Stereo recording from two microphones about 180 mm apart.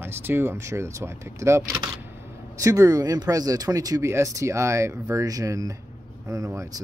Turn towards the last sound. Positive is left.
turn(degrees=-20)  # may be behind; listen again after turning